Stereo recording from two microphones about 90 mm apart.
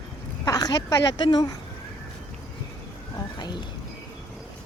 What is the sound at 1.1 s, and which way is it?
Speech, 50° left (ahead or behind).